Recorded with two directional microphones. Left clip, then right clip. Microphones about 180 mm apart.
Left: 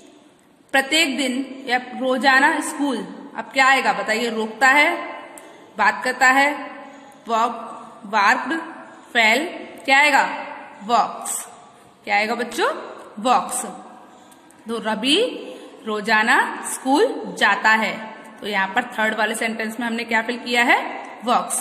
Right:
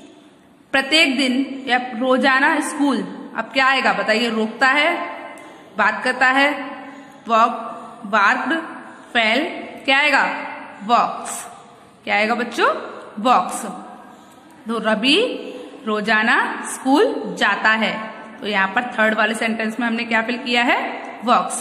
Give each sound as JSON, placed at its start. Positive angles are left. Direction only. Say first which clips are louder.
{"t": 0.7, "sound": "a man's voice", "louder": "right 2 dB", "side_deg": 10}
{"t": 14.7, "sound": "a man's voice", "louder": "right 3 dB", "side_deg": 15}